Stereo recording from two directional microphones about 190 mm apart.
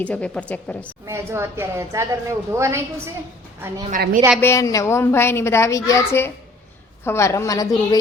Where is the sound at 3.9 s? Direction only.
45° right (ahead or behind).